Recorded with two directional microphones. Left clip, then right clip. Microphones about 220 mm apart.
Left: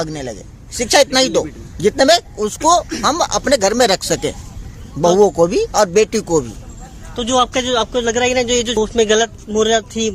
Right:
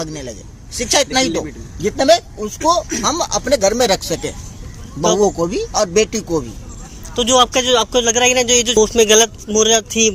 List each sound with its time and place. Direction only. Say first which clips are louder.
0.0 s a man's voice: left 3 dB; 45° left (ahead or behind)
7.2 s speech: right 3 dB; centre (ahead or behind)